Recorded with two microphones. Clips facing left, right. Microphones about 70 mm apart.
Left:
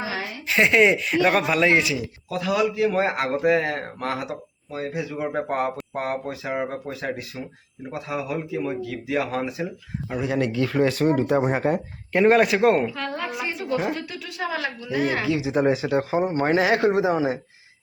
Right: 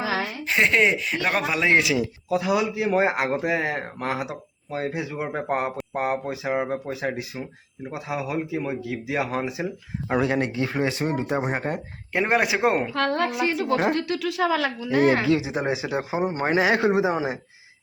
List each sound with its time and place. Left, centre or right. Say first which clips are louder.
0.6 s speech: left 3 dB; centre
4.7 s speech: right 1 dB; right
10.8 s speech: left 6 dB; centre
12.9 s a woman's voice: right 6 dB; right
14.9 s speech: right 4 dB; right
15.5 s speech: left 5 dB; centre